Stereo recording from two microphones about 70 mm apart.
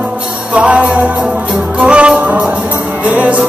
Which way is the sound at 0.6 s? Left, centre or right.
Centre.